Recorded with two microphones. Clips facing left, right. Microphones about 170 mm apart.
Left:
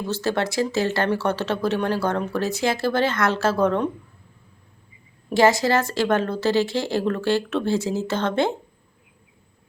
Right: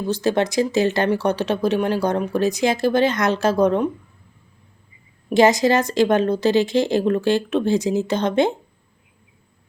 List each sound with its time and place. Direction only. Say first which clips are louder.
0.1 s speech: right 5 dB; 15° right (ahead or behind)
5.3 s speech: right 3 dB; 20° right (ahead or behind)